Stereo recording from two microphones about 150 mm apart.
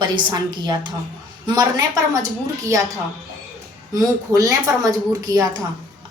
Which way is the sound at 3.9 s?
25° right (ahead or behind).